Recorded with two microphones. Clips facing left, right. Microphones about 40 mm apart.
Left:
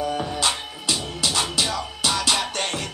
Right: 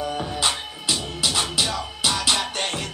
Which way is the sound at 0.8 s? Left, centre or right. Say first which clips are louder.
Even; centre.